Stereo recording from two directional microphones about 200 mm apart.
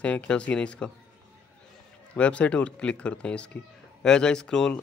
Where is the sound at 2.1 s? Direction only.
5° left (ahead or behind).